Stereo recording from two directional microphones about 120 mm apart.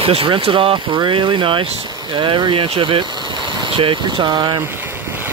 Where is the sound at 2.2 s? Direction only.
45° right (ahead or behind).